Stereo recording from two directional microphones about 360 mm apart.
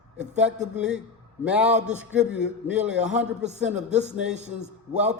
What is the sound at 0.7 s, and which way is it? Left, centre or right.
Speech, centre.